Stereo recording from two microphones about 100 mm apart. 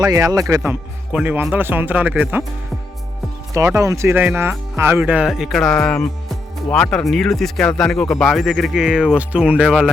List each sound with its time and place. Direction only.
0.0 s speech: 35° right (ahead or behind)
1.1 s speech: 15° right (ahead or behind)
3.5 s speech: 30° right (ahead or behind)
5.3 s speech: centre (ahead or behind)